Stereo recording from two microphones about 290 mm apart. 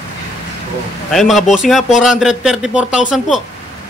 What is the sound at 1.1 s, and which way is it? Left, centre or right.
A man's voice, centre.